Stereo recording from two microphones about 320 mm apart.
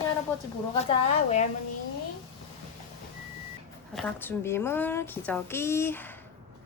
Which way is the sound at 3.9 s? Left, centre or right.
Centre.